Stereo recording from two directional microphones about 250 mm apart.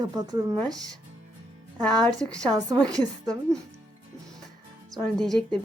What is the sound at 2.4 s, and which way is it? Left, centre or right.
Speech, centre.